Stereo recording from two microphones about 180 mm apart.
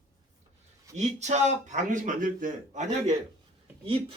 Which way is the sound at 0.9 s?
40° right (ahead or behind).